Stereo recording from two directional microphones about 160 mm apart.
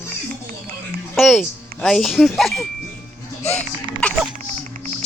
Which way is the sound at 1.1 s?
Centre (ahead or behind).